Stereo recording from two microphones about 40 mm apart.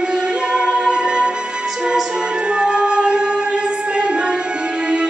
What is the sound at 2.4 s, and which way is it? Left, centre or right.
Music, right.